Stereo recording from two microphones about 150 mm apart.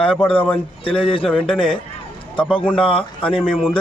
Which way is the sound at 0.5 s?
35° left (ahead or behind).